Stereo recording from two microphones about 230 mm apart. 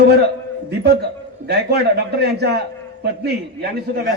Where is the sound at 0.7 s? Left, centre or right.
Right.